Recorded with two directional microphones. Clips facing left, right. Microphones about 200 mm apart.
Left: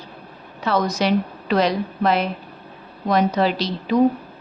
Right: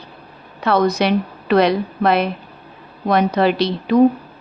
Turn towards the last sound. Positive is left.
turn(degrees=-60)  # may be behind; listen again after turning